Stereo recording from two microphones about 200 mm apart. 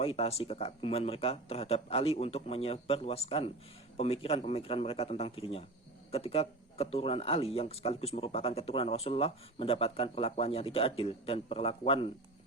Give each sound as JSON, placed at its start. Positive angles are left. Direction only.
{"t": 0.0, "sound": "speech", "side_deg": 30}